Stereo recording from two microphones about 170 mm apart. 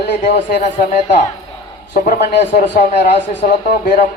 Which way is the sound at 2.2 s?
90° left.